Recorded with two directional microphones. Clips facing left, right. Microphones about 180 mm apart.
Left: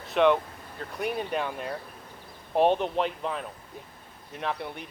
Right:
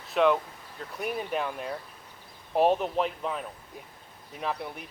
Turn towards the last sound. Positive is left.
turn(degrees=0)  # may be behind; listen again after turning